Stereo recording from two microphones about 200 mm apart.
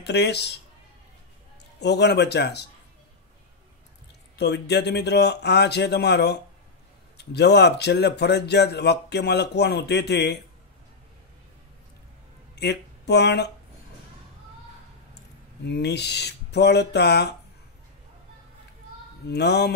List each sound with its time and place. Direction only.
0.0 s speech: 55° left (ahead or behind)
1.8 s speech: 55° left (ahead or behind)
4.4 s speech: 55° left (ahead or behind)
12.5 s speech: 55° left (ahead or behind)
15.6 s speech: 55° left (ahead or behind)
19.2 s speech: 55° left (ahead or behind)